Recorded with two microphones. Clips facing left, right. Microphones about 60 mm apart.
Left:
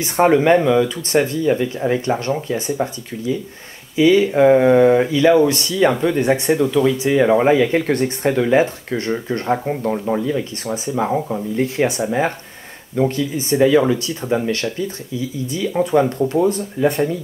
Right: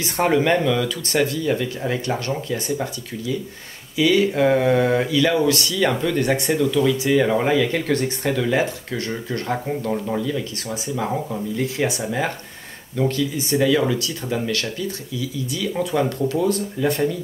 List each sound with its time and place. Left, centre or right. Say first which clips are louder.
0.0 s speech: left 5 dB; centre